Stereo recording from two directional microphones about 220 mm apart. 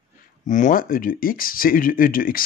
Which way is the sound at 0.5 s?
35° left (ahead or behind).